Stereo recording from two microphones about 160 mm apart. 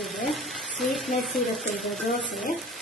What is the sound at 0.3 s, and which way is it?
Speech, centre (ahead or behind).